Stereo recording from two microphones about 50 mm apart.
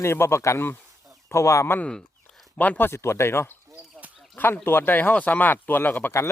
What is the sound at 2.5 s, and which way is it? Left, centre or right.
Speech, left.